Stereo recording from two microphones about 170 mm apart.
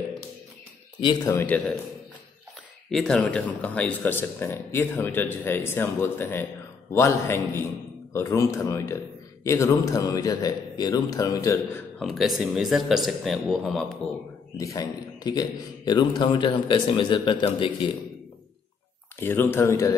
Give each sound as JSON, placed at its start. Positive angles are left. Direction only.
{"t": 1.0, "sound": "speech", "side_deg": 15}
{"t": 2.9, "sound": "a man's voice", "side_deg": 5}
{"t": 12.0, "sound": "speech", "side_deg": 0}
{"t": 14.6, "sound": "a man's voice", "side_deg": 20}
{"t": 19.1, "sound": "speech", "side_deg": 10}